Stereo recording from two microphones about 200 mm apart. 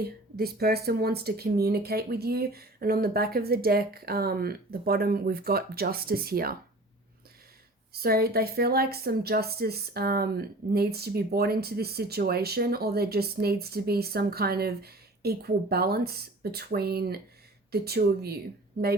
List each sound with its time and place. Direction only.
0.0 s speech: 50° right (ahead or behind)
7.9 s speech: 50° right (ahead or behind)